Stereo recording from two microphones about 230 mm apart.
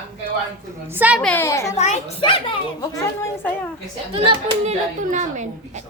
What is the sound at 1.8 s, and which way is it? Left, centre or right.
Speech, left.